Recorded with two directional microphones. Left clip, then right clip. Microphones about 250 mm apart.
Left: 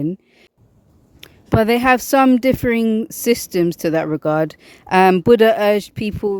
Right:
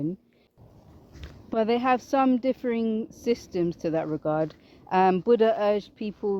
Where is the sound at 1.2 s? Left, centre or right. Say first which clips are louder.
Left 9 dB; left.